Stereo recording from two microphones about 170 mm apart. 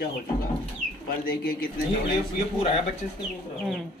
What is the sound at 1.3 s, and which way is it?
Speech, 60° left (ahead or behind).